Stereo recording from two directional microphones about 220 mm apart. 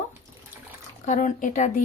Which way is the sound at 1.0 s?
35° left (ahead or behind).